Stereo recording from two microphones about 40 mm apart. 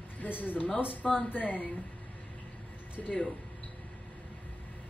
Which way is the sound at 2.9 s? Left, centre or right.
Left.